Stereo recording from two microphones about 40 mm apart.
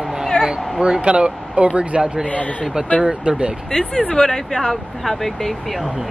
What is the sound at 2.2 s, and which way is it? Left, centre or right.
Speech, left.